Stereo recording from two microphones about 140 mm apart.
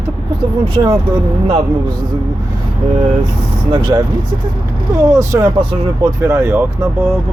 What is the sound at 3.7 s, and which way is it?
Speech, 35° right (ahead or behind).